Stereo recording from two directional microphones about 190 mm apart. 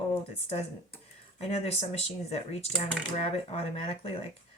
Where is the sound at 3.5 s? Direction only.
30° left (ahead or behind).